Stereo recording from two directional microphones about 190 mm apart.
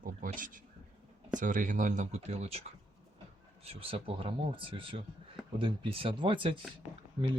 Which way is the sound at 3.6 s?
30° right (ahead or behind).